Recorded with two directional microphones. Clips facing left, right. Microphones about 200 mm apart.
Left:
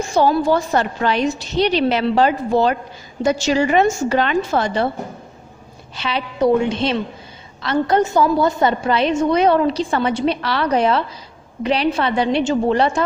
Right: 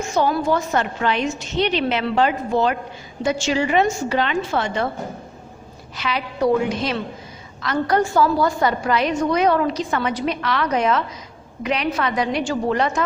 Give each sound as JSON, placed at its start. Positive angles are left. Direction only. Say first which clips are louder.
{"t": 0.0, "sound": "a woman's voice", "louder": "left 4 dB", "side_deg": 35}
{"t": 5.9, "sound": "a woman's voice", "louder": "left 3 dB", "side_deg": 30}